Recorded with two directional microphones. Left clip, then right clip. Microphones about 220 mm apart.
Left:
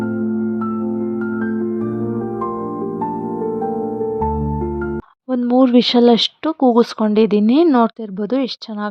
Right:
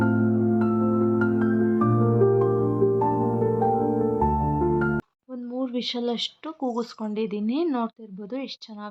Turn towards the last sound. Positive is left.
turn(degrees=35)  # may be behind; listen again after turning